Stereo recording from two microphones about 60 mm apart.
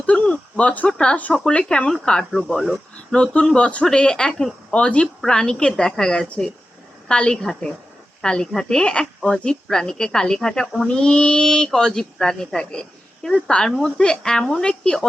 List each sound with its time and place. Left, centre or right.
0.0 s a sound: left
1.3 s speech: centre
3.1 s speech: centre